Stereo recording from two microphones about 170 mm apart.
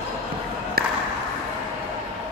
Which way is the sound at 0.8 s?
60° right (ahead or behind).